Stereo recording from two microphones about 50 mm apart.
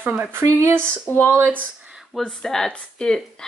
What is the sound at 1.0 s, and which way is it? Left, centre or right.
Speech, left.